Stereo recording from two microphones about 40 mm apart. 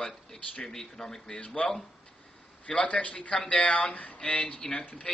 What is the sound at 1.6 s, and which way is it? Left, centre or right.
Speech, left.